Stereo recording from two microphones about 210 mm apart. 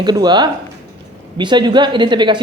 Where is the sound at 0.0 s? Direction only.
20° right (ahead or behind).